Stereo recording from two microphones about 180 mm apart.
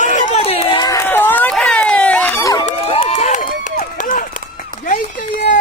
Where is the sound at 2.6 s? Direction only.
35° left (ahead or behind).